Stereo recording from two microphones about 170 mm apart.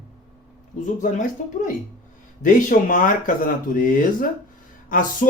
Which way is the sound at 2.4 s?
50° left (ahead or behind).